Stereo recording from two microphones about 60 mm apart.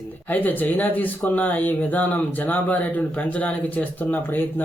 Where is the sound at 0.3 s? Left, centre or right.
Left.